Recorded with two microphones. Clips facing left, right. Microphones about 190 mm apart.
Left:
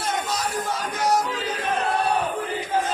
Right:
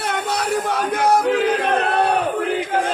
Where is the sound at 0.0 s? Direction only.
65° right (ahead or behind).